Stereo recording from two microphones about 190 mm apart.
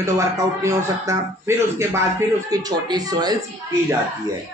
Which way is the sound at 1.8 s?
15° right (ahead or behind).